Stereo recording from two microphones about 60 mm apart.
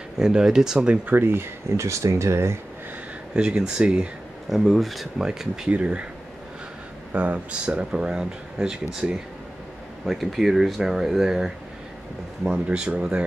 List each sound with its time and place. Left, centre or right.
0.2 s speech: centre
1.0 s speech: right
1.9 s speech: right
3.3 s speech: centre
4.5 s speech: centre
5.7 s speech: right
7.1 s speech: right
10.0 s speech: centre